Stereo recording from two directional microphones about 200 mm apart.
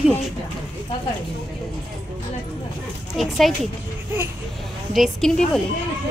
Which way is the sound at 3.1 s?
Centre (ahead or behind).